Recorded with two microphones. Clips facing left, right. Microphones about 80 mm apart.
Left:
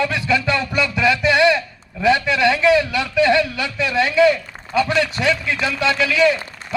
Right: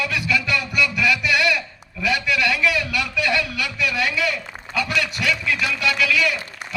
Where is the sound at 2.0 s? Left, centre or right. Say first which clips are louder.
Left 6 dB; left.